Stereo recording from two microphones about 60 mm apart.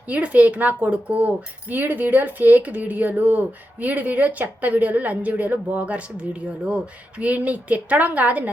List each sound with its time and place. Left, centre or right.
0.1 s speech: right